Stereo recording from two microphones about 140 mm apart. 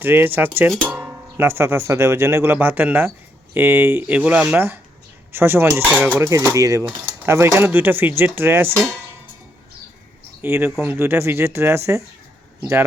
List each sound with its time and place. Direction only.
0.0 s speech: 15° right (ahead or behind)
10.4 s speech: 15° right (ahead or behind)